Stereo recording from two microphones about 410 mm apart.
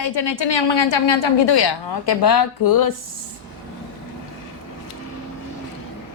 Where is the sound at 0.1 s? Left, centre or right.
Left.